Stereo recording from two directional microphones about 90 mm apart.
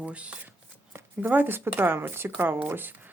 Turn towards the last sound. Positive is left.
turn(degrees=-20)  # may be behind; listen again after turning